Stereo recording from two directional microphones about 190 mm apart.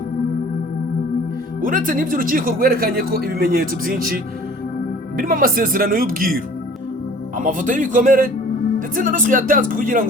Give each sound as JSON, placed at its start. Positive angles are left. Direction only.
{"t": 1.6, "sound": "speech", "side_deg": -45}